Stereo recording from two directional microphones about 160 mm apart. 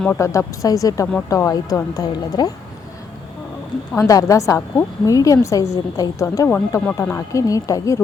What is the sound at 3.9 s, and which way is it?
A woman's voice, 20° left (ahead or behind).